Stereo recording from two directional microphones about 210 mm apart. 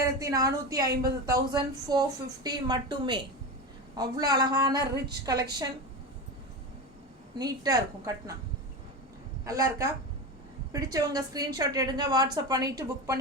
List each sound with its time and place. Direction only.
0.0 s a woman's voice: 15° right (ahead or behind)
4.8 s a woman's voice: 50° right (ahead or behind)
5.2 s a woman's voice: 15° right (ahead or behind)
7.3 s a woman's voice: 20° right (ahead or behind)
9.4 s a woman's voice: 15° right (ahead or behind)